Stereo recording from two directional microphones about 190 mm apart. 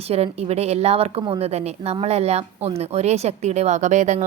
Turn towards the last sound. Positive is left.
turn(degrees=-40)  # may be behind; listen again after turning